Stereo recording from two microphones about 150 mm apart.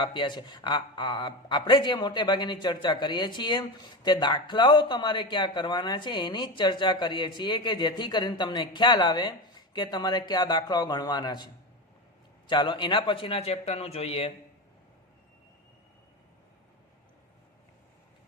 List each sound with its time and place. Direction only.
0.0 s speech: 30° left (ahead or behind)